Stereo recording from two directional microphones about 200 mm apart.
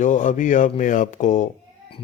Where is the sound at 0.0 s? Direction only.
40° left (ahead or behind).